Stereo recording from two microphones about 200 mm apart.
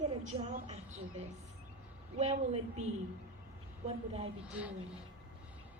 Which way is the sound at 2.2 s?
30° right (ahead or behind).